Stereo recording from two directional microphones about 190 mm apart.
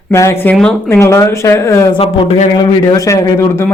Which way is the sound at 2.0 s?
30° left (ahead or behind).